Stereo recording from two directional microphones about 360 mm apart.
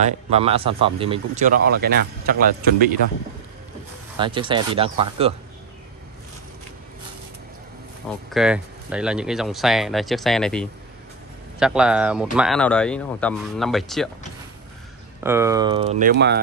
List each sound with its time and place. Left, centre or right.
0.0 s speech: centre
4.2 s speech: centre
8.3 s speech: centre
15.2 s speech: centre; by 16.3 s right